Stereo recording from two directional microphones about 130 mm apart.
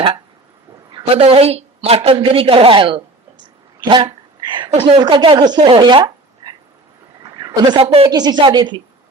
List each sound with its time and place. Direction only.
1.1 s a woman's voice: 50° right (ahead or behind)
3.8 s sneeze: 35° right (ahead or behind)
4.7 s speech: 40° right (ahead or behind)
7.3 s a sound: 30° right (ahead or behind)
7.8 s a woman's voice: 45° right (ahead or behind)
8.1 s speech: 35° right (ahead or behind)